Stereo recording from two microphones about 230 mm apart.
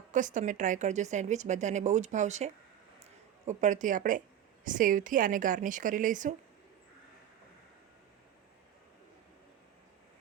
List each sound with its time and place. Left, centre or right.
0.1 s a woman's voice: right